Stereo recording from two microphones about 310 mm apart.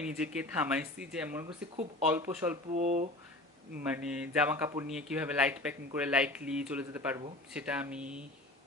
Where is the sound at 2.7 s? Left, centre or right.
Right.